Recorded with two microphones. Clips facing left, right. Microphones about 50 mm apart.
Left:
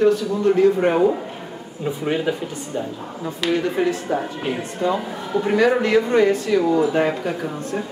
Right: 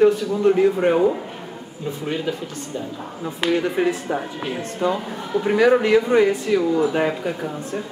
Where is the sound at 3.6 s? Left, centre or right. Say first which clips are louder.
Even; centre.